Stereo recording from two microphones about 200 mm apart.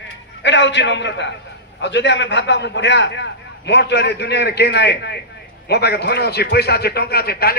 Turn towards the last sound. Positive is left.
turn(degrees=50)  # may be behind; listen again after turning